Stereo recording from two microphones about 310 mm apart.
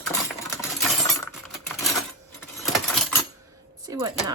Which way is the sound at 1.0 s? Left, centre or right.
Centre.